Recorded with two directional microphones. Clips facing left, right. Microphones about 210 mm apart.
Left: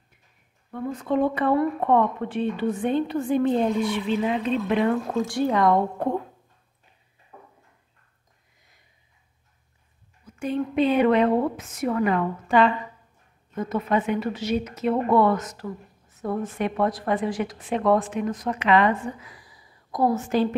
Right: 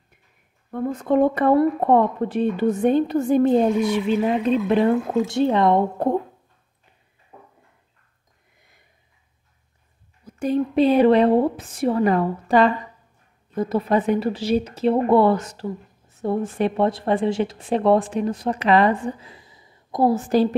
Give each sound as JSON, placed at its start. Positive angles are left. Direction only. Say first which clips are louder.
{"t": 0.7, "sound": "speech", "louder": "right 5 dB", "side_deg": -50}
{"t": 5.2, "sound": "speech", "louder": "right 2 dB", "side_deg": -25}
{"t": 7.3, "sound": "a sound", "louder": "right 1 dB", "side_deg": -25}
{"t": 10.2, "sound": "speech", "louder": "right 5 dB", "side_deg": -40}